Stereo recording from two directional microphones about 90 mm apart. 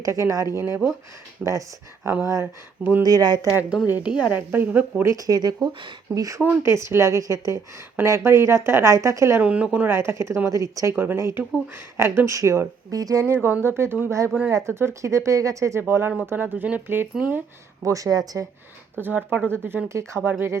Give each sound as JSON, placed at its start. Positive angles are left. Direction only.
{"t": 0.0, "sound": "speech", "side_deg": -35}
{"t": 2.2, "sound": "speech", "side_deg": -35}
{"t": 3.0, "sound": "speech", "side_deg": -45}
{"t": 3.4, "sound": "speech", "side_deg": -10}
{"t": 3.8, "sound": "speech", "side_deg": -20}
{"t": 5.0, "sound": "speech", "side_deg": -40}
{"t": 9.4, "sound": "speech", "side_deg": -15}
{"t": 9.9, "sound": "speech", "side_deg": -30}
{"t": 10.9, "sound": "speech", "side_deg": -25}
{"t": 13.2, "sound": "speech", "side_deg": -25}
{"t": 15.8, "sound": "speech", "side_deg": -25}
{"t": 17.8, "sound": "speech", "side_deg": -40}
{"t": 18.9, "sound": "speech", "side_deg": -20}